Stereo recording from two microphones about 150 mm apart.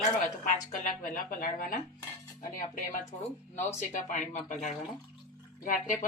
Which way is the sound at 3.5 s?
55° left (ahead or behind).